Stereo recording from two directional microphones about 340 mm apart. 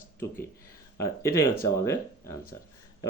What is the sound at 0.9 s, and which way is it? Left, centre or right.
Speech, centre.